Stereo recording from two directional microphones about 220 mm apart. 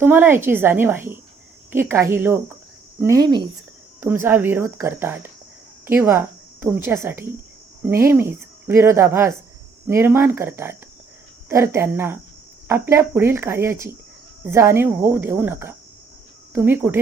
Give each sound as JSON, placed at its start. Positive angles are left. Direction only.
{"t": 0.0, "sound": "a woman's voice", "side_deg": -10}